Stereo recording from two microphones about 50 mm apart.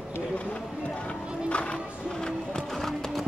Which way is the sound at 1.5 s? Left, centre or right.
Left.